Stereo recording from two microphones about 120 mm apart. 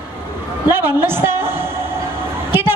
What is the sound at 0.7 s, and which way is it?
A woman's voice, 20° right (ahead or behind).